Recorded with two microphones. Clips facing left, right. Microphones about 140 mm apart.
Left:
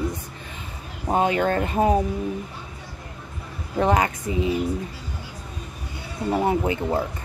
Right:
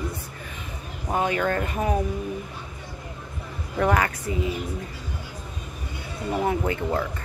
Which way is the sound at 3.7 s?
25° left (ahead or behind).